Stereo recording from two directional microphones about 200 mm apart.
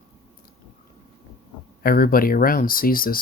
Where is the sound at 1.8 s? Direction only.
45° left (ahead or behind).